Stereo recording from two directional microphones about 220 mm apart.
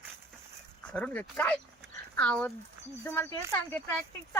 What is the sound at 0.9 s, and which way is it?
Speech, 5° left (ahead or behind).